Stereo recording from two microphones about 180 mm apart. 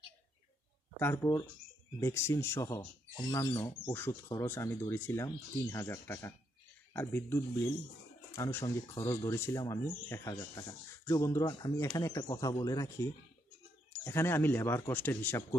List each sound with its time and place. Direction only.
0.9 s speech: 15° left (ahead or behind)